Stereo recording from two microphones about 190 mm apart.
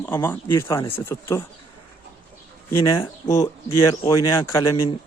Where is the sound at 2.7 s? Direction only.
15° left (ahead or behind).